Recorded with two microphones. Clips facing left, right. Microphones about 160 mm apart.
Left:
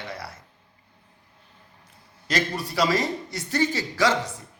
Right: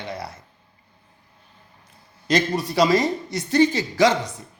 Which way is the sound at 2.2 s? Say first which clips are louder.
Right 6 dB; 20° right (ahead or behind).